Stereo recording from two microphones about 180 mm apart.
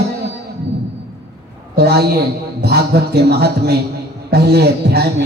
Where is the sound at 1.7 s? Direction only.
60° right (ahead or behind).